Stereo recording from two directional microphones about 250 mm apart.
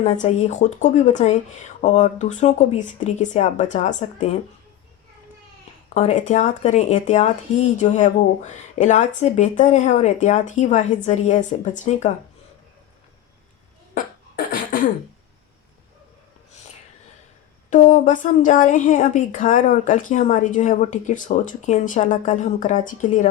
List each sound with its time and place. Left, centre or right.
0.0 s speech: left
5.9 s speech: left
13.9 s beatboxing: left
17.7 s a woman's voice: left